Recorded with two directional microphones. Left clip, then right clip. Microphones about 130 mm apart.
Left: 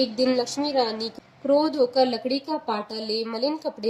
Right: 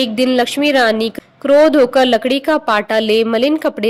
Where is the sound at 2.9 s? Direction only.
50° right (ahead or behind).